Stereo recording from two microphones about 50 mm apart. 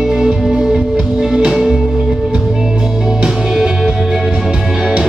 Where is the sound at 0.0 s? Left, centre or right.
Centre.